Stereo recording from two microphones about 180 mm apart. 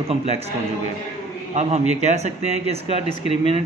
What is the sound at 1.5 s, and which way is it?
A man's voice, 40° right (ahead or behind).